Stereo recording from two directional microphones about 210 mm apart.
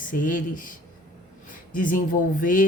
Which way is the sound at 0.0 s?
40° left (ahead or behind).